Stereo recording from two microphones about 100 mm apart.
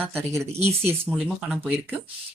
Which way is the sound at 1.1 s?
10° right (ahead or behind).